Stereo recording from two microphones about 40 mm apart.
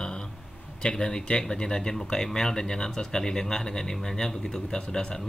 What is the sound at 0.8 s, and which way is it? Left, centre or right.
Speech, left.